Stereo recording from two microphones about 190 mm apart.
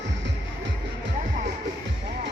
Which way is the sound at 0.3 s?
70° right (ahead or behind).